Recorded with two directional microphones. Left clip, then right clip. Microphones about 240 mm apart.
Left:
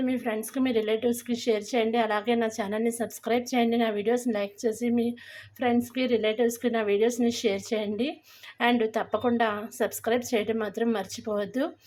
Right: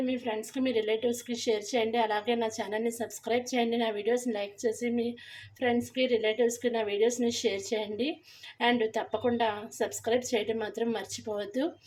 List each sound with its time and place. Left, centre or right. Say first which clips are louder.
0.5 s a woman's voice: left 2 dB; left